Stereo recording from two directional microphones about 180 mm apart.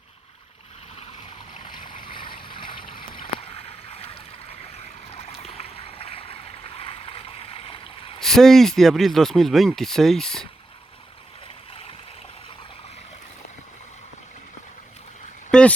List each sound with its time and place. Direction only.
2.0 s boat: 30° left (ahead or behind)
5.1 s stream: 35° left (ahead or behind)
8.2 s speech: centre (ahead or behind)
11.7 s stream: 30° left (ahead or behind)
15.5 s a sound: 5° left (ahead or behind)